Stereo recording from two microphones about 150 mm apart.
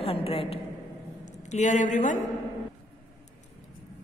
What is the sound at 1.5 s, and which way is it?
Speech, 55° left (ahead or behind).